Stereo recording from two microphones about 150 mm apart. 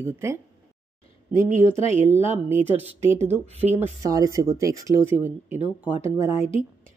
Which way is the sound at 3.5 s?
45° right (ahead or behind).